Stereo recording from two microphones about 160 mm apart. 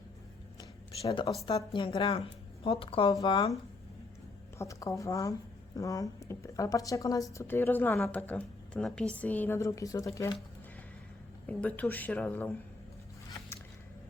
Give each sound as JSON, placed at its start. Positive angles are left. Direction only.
{"t": 1.0, "sound": "speech", "side_deg": 30}
{"t": 4.5, "sound": "a woman's voice", "side_deg": 20}
{"t": 11.4, "sound": "a woman's voice", "side_deg": 10}